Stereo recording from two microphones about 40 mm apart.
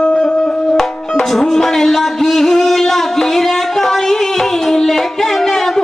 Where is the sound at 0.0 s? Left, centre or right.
Left.